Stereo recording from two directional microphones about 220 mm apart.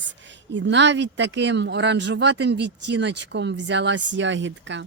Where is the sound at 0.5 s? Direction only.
55° right (ahead or behind).